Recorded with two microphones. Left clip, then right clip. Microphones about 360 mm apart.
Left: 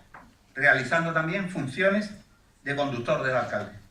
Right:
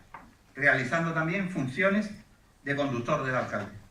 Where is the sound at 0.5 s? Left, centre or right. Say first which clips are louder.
Left 3 dB; left.